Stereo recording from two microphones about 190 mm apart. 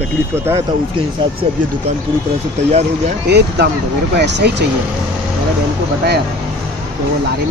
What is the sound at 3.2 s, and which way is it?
Speech, 60° right (ahead or behind).